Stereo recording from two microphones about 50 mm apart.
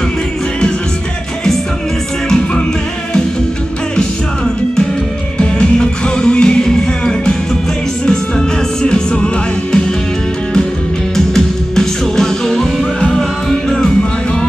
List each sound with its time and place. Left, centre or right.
2.2 s music: centre
5.4 s music: centre
11.1 s music: centre